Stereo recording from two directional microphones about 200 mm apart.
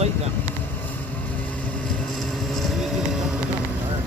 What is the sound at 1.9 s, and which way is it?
Vehicle, centre (ahead or behind).